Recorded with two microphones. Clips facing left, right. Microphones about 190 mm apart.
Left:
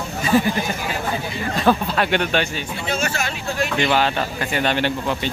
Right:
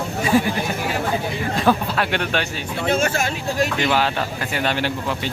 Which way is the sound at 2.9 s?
50° right (ahead or behind).